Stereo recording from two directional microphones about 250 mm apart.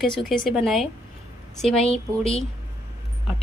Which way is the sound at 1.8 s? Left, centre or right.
Left.